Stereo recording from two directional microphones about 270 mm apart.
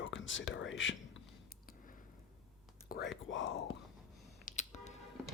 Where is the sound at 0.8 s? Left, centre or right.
Left.